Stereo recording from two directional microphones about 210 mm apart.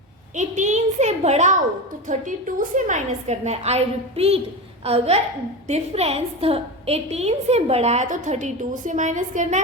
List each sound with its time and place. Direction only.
0.3 s a woman's voice: 35° right (ahead or behind)